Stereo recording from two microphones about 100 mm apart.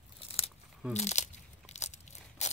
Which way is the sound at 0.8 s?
10° right (ahead or behind).